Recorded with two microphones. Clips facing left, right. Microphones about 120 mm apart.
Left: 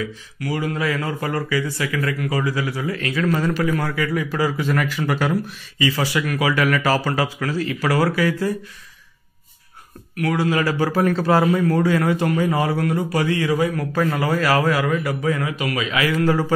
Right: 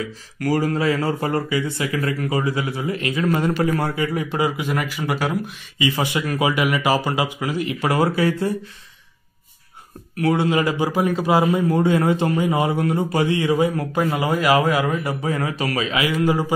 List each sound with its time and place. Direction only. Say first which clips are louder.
0.4 s a man's voice: right 4 dB; 40° right (ahead or behind)
4.6 s speech: left 2 dB; 15° right (ahead or behind)
5.3 s a man's voice: left 2 dB; 20° right (ahead or behind)
6.5 s a man's voice: left 2 dB; 15° right (ahead or behind)
10.1 s a man's voice: right 2 dB; 25° right (ahead or behind)
15.9 s speech: left 2 dB; 20° right (ahead or behind)